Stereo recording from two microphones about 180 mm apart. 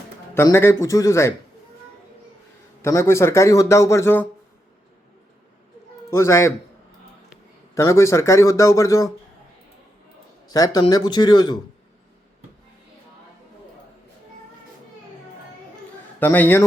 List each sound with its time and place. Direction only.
0.3 s a man's voice: 15° left (ahead or behind)
2.8 s a man's voice: 15° left (ahead or behind)
6.1 s a man's voice: 15° left (ahead or behind)
7.8 s a man's voice: 15° left (ahead or behind)
10.5 s speech: 20° left (ahead or behind)
16.2 s a man's voice: 10° left (ahead or behind)